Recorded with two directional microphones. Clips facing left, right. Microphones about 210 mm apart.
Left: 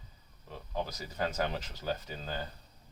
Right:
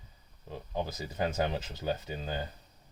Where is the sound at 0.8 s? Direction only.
20° right (ahead or behind).